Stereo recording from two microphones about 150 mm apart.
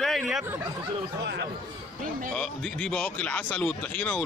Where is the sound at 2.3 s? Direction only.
5° left (ahead or behind).